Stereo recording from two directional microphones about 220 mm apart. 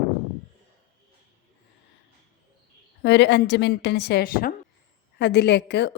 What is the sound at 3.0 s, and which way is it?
A woman's voice, 50° left (ahead or behind).